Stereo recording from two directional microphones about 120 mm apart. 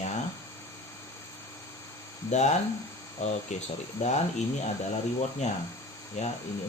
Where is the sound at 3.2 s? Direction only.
75° left (ahead or behind).